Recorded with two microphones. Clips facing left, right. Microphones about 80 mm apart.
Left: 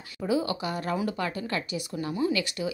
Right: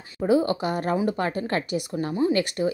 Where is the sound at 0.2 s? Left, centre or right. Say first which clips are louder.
Right 6 dB; right.